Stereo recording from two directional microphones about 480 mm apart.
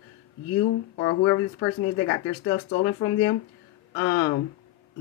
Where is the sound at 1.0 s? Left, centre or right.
Left.